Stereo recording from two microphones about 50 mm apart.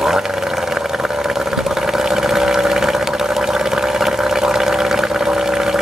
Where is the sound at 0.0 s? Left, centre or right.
Centre.